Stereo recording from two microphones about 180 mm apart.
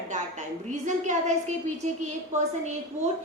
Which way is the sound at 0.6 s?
40° right (ahead or behind).